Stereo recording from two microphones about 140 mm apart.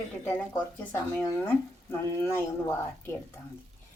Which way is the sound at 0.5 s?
10° left (ahead or behind).